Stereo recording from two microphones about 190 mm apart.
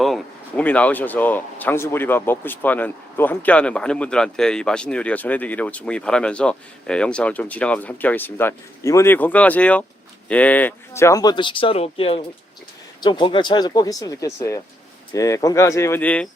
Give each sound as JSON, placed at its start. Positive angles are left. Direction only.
{"t": 0.0, "sound": "speech", "side_deg": 5}